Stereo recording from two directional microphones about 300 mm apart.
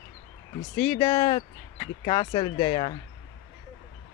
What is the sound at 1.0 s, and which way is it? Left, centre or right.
Speech, centre.